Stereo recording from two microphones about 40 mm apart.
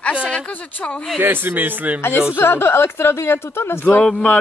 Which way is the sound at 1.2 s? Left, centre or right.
Right.